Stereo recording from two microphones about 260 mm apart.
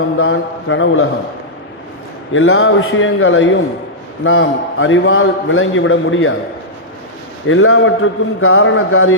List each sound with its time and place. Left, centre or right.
0.2 s a man's voice: left
2.3 s a man's voice: left
7.4 s a man's voice: left